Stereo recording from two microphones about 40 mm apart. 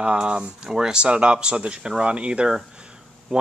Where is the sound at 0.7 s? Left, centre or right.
Centre.